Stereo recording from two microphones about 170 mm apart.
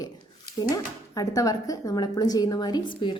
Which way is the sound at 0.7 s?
20° left (ahead or behind).